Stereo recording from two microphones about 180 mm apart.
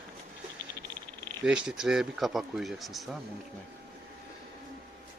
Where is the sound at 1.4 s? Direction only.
5° right (ahead or behind).